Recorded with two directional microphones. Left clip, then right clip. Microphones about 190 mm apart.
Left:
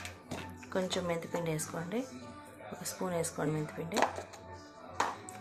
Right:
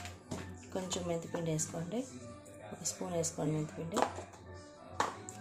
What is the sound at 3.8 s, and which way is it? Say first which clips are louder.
Speech: left 3 dB; 35° left (ahead or behind).